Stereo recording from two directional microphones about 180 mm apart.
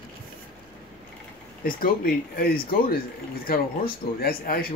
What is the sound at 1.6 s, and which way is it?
Speech, 55° left (ahead or behind).